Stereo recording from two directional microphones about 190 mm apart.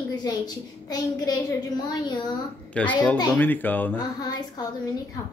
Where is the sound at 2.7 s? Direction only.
5° left (ahead or behind).